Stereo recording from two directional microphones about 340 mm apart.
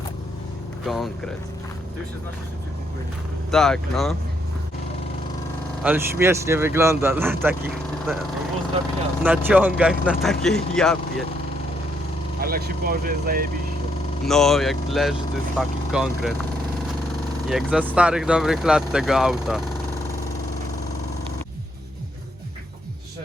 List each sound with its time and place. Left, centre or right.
0.9 s speech: centre
3.5 s speech: centre
5.8 s speech: centre
9.2 s speech: centre
12.4 s speech: right
14.3 s speech: centre
17.5 s speech: centre